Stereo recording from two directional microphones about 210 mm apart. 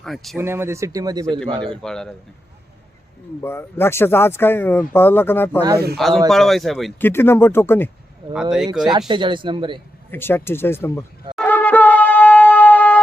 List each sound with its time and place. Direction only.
0.0 s speech: centre (ahead or behind)
0.3 s speech: 10° right (ahead or behind)
1.6 s speech: 5° left (ahead or behind)
3.4 s speech: 10° left (ahead or behind)
7.1 s speech: 10° left (ahead or behind)
8.3 s speech: 5° right (ahead or behind)
8.8 s speech: 20° right (ahead or behind)
10.1 s speech: 10° left (ahead or behind)
11.3 s shofar: 10° left (ahead or behind)